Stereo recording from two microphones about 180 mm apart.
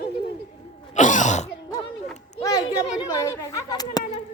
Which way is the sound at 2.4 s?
20° left (ahead or behind).